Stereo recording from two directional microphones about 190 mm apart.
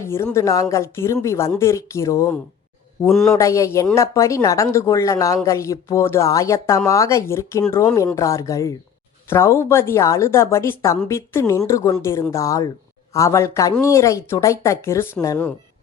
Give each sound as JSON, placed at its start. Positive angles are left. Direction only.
{"t": 0.0, "sound": "speech", "side_deg": 15}
{"t": 3.1, "sound": "a man's voice", "side_deg": 0}
{"t": 3.3, "sound": "speech", "side_deg": 15}